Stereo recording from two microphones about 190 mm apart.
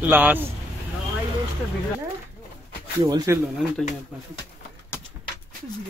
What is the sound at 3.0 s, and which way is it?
Speech, 20° right (ahead or behind).